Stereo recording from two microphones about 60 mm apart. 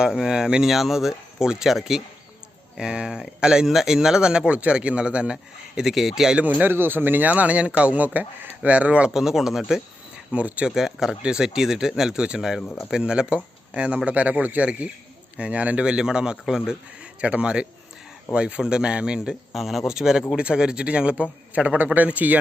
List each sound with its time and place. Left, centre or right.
0.0 s speech: centre
6.3 s speech: right
9.1 s speech: centre
10.3 s speech: right
10.8 s speech: centre
19.5 s speech: centre; by 22.4 s right